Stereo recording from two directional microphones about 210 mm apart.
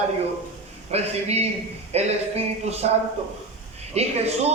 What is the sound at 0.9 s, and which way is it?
A man's voice, 30° right (ahead or behind).